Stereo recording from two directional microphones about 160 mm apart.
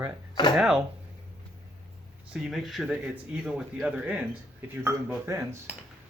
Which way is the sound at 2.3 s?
5° right (ahead or behind).